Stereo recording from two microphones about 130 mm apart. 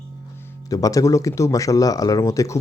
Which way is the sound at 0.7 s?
25° left (ahead or behind).